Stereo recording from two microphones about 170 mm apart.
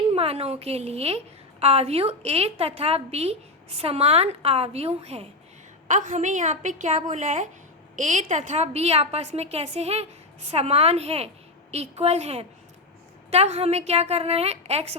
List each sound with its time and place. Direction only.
0.1 s a woman's voice: 35° right (ahead or behind)
5.9 s a woman's voice: 50° right (ahead or behind)